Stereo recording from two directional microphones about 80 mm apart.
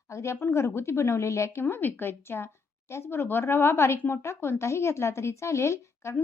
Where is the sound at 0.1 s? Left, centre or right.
Left.